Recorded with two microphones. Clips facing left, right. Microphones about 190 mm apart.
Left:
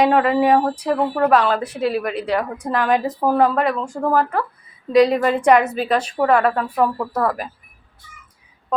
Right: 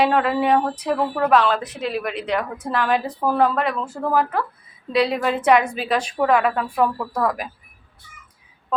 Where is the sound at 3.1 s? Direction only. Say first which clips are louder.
Left 2 dB; 15° left (ahead or behind).